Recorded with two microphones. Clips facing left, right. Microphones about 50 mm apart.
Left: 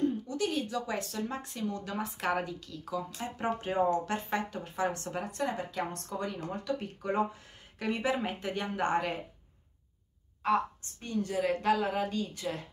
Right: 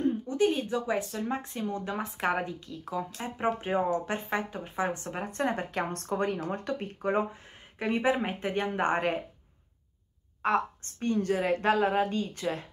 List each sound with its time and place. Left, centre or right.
0.0 s speech: right
10.4 s speech: right